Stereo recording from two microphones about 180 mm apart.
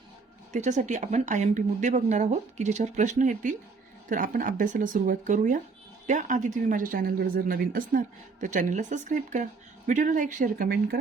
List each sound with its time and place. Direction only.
0.5 s a woman's voice: 40° right (ahead or behind)